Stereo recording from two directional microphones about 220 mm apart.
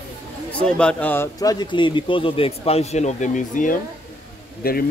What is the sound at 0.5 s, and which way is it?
Speech, 5° left (ahead or behind).